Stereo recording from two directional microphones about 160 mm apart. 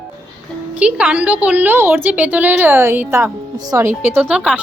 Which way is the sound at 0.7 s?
5° right (ahead or behind).